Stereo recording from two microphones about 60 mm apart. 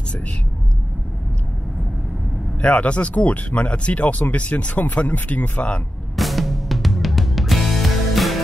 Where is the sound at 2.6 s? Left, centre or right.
Centre.